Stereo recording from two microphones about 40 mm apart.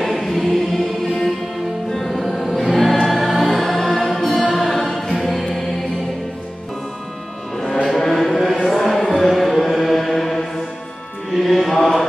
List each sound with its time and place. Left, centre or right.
0.0 s choir: centre
1.9 s music: centre
7.5 s music: centre
8.1 s a sound: centre
8.6 s music: centre